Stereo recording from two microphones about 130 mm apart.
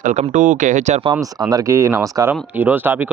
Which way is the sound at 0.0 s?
65° right (ahead or behind).